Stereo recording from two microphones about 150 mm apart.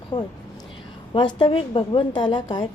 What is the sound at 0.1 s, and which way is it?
A woman's voice, 30° left (ahead or behind).